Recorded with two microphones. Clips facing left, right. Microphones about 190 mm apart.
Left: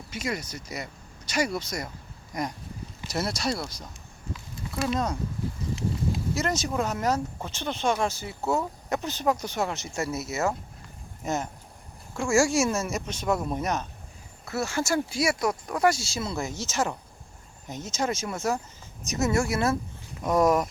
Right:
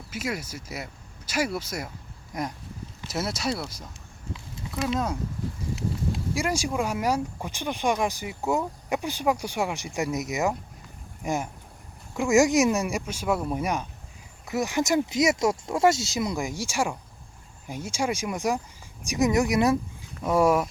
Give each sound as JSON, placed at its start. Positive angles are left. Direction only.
{"t": 0.1, "sound": "speech", "side_deg": -5}
{"t": 5.7, "sound": "a sound", "side_deg": -5}
{"t": 6.7, "sound": "speech", "side_deg": -10}